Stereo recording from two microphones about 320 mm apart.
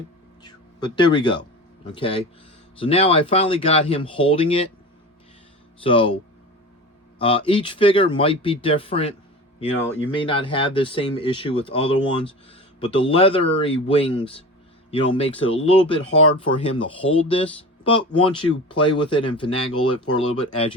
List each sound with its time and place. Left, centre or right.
0.4 s speech: centre
5.8 s speech: centre
7.2 s speech: centre
16.7 s speech: centre
19.5 s speech: left
20.1 s speech: centre